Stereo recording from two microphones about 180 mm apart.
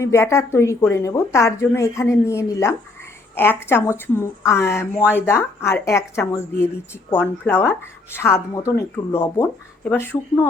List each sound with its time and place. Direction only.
0.0 s a woman's voice: 15° left (ahead or behind)